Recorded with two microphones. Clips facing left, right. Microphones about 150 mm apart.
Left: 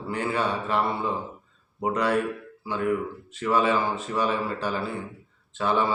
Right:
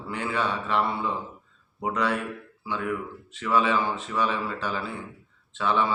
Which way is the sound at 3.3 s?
45° left (ahead or behind).